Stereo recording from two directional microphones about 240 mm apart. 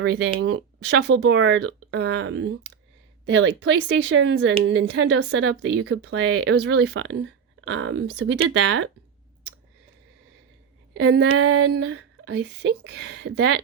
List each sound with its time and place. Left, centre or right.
0.0 s speech: right
10.9 s speech: right
11.3 s speech: right